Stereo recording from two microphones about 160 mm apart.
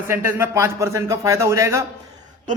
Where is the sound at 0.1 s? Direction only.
15° right (ahead or behind).